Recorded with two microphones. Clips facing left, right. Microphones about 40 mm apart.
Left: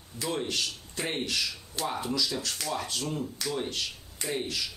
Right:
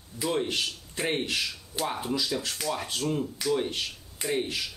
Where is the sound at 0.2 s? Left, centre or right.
Right.